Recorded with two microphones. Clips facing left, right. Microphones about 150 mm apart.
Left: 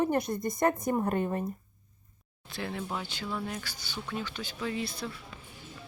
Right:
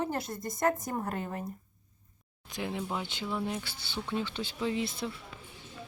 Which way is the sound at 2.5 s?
15° right (ahead or behind).